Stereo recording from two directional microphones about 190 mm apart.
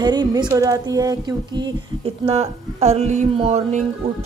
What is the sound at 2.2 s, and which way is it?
A man's voice, 35° right (ahead or behind).